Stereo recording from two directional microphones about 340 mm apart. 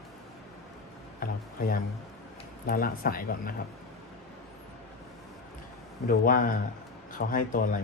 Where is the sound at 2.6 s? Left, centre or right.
Left.